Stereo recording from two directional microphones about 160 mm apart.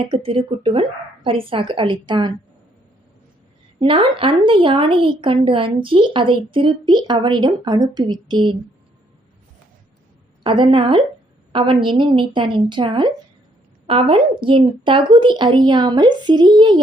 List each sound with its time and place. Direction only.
0.1 s a woman's voice: 35° right (ahead or behind)
3.8 s a woman's voice: 30° right (ahead or behind)
10.4 s a woman's voice: 30° right (ahead or behind)